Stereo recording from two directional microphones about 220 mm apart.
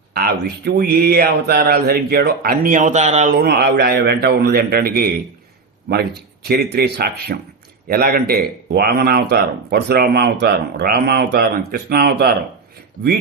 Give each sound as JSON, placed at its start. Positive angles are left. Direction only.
{"t": 0.1, "sound": "speech", "side_deg": -45}
{"t": 3.3, "sound": "speech", "side_deg": -45}